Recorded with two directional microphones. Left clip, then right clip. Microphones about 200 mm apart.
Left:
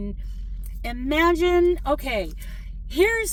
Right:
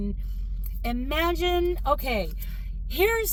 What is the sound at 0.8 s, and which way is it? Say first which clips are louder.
Speech: left 5 dB; 15° left (ahead or behind).